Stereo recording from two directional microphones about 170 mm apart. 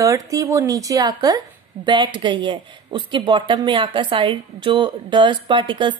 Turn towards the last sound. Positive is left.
turn(degrees=-30)  # may be behind; listen again after turning